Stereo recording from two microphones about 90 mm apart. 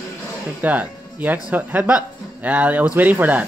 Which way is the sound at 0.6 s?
20° right (ahead or behind).